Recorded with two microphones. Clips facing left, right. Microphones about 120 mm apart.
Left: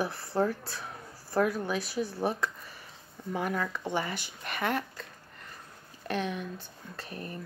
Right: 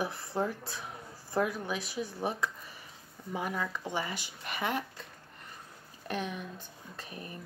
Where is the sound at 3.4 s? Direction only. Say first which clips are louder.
Left 3 dB; 50° left (ahead or behind).